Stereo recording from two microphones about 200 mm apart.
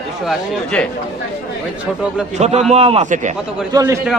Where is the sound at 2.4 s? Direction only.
35° right (ahead or behind).